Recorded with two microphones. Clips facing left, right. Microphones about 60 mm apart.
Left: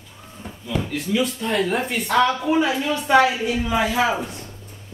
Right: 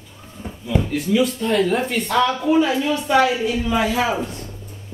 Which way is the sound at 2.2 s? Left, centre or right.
Centre.